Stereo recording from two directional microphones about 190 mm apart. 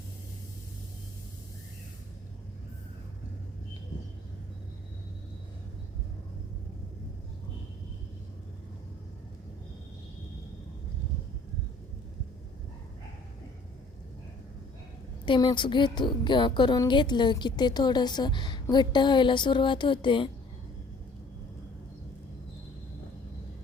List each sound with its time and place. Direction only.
15.3 s a woman's voice: 25° left (ahead or behind)